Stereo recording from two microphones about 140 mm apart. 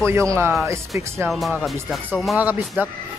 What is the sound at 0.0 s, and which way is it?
Speech, 20° right (ahead or behind).